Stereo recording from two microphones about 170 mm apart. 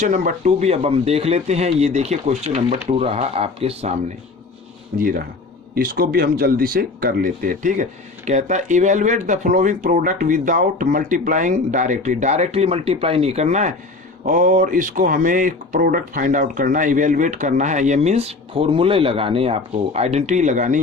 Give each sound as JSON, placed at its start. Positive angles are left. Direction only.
{"t": 0.0, "sound": "speech", "side_deg": -45}
{"t": 4.9, "sound": "speech", "side_deg": -55}